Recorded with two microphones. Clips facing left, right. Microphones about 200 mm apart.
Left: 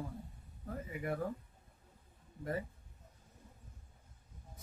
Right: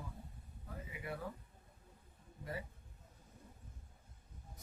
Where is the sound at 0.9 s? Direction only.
50° left (ahead or behind).